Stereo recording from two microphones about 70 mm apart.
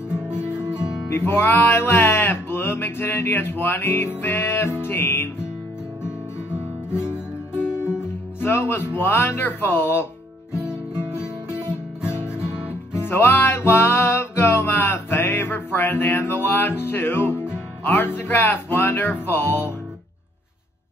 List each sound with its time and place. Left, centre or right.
0.1 s music: centre
1.1 s music: left
6.9 s music: centre
8.4 s music: left
11.4 s music: left
12.4 s music: centre
12.9 s music: left